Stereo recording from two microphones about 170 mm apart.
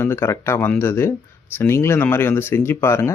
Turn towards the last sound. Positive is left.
turn(degrees=15)  # may be behind; listen again after turning